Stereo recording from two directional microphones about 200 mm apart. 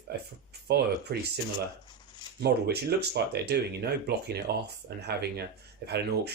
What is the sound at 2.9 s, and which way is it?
Speech, 55° right (ahead or behind).